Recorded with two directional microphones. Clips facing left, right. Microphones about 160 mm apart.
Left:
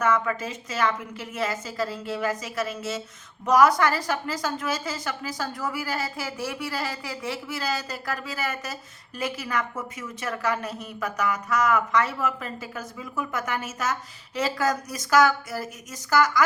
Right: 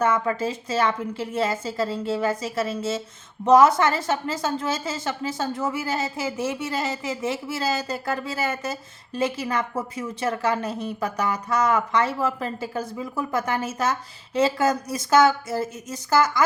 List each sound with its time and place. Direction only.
0.0 s a woman's voice: 30° right (ahead or behind)